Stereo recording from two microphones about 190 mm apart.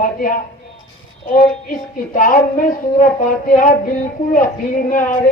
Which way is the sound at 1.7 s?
45° left (ahead or behind).